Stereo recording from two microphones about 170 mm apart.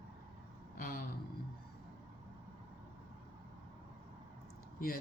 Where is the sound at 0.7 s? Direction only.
60° left (ahead or behind).